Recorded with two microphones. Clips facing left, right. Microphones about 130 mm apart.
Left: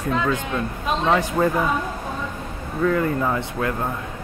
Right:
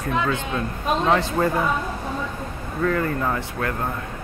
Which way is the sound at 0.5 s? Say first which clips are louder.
Right 1 dB; centre (ahead or behind).